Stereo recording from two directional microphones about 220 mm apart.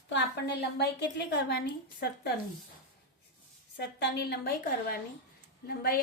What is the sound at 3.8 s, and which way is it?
A woman's voice, 50° left (ahead or behind).